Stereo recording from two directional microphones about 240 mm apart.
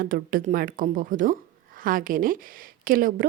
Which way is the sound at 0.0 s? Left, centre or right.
Right.